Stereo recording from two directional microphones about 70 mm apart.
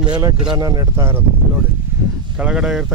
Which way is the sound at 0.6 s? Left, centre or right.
Right.